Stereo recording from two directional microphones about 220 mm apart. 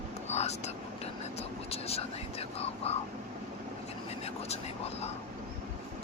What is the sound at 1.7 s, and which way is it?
Whispering, 25° left (ahead or behind).